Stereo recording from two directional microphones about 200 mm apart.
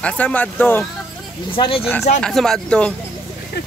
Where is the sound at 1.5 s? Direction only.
25° left (ahead or behind).